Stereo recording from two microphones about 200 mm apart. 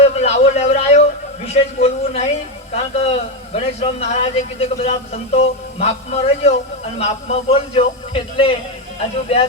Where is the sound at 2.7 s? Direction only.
30° left (ahead or behind).